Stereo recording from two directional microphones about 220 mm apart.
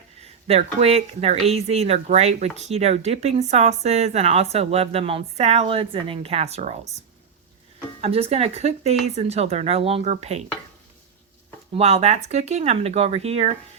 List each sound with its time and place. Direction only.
0.2 s speech: 30° right (ahead or behind)
8.0 s speech: 25° right (ahead or behind)
11.7 s speech: 30° right (ahead or behind)